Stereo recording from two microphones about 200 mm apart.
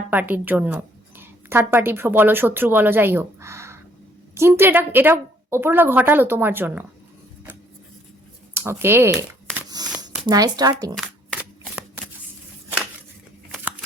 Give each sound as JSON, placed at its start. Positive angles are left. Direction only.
{"t": 0.1, "sound": "a woman's voice", "side_deg": -10}
{"t": 8.8, "sound": "a woman's voice", "side_deg": -10}
{"t": 9.6, "sound": "a sound", "side_deg": -20}
{"t": 10.0, "sound": "speech", "side_deg": -20}
{"t": 10.9, "sound": "shuffling cards", "side_deg": -5}